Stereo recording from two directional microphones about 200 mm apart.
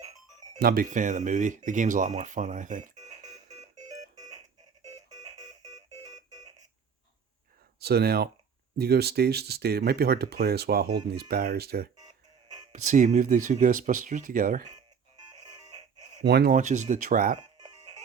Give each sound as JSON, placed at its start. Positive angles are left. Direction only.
{"t": 0.6, "sound": "speech", "side_deg": -45}
{"t": 3.8, "sound": "music", "side_deg": -20}
{"t": 7.8, "sound": "speech", "side_deg": -50}
{"t": 12.7, "sound": "speech", "side_deg": -40}
{"t": 16.2, "sound": "speech", "side_deg": -55}